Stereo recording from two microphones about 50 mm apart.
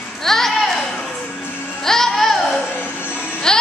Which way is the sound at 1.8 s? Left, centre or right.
Centre.